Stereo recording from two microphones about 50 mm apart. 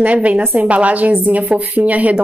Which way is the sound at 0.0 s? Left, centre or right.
Right.